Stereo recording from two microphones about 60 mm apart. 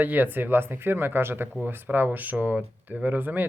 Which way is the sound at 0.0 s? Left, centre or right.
Right.